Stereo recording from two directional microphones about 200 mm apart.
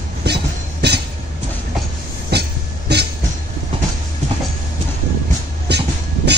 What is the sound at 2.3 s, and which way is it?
Train, 55° right (ahead or behind).